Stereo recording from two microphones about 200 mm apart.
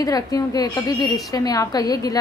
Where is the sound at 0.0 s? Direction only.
20° left (ahead or behind).